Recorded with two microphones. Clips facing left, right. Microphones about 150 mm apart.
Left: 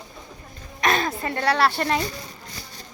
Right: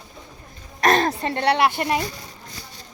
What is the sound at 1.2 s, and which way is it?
Speech, 25° right (ahead or behind).